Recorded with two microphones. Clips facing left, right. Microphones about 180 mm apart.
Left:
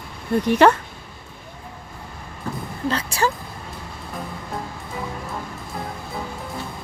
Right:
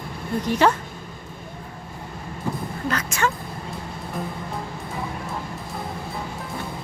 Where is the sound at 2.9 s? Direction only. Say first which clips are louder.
Left 2 dB; 30° left (ahead or behind).